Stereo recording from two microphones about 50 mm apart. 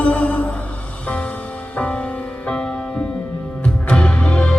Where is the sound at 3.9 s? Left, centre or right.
Left.